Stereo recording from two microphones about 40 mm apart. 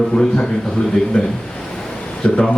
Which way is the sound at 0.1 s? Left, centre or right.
Centre.